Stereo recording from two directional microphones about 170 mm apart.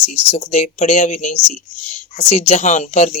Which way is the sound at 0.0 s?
40° left (ahead or behind).